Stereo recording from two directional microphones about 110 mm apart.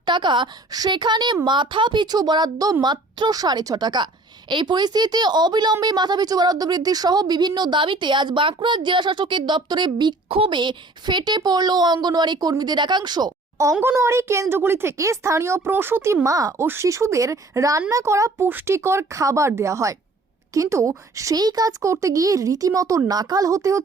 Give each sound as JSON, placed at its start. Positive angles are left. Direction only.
{"t": 0.0, "sound": "a woman's voice", "side_deg": -45}
{"t": 13.8, "sound": "speech", "side_deg": -25}